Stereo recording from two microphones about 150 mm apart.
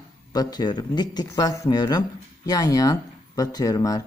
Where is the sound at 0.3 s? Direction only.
25° left (ahead or behind).